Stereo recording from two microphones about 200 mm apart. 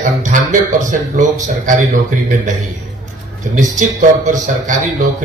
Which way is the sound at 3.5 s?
40° right (ahead or behind).